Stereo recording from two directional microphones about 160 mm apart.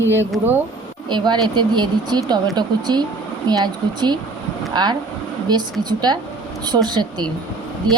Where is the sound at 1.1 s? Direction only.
30° right (ahead or behind).